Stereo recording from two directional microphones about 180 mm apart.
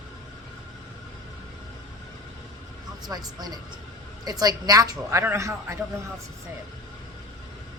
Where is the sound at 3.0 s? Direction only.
20° right (ahead or behind).